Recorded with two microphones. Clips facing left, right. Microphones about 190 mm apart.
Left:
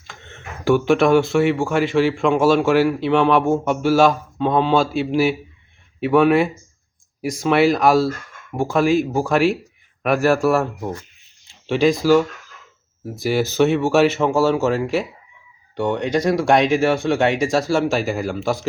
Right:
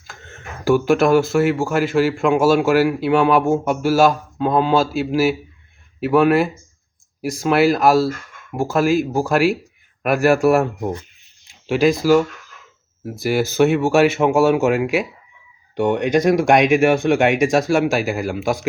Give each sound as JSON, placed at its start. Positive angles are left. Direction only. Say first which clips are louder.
{"t": 0.1, "sound": "speech", "louder": "right 1 dB", "side_deg": -5}
{"t": 11.6, "sound": "speech", "louder": "right 1 dB", "side_deg": -5}
{"t": 13.2, "sound": "speech", "louder": "right 1 dB", "side_deg": -5}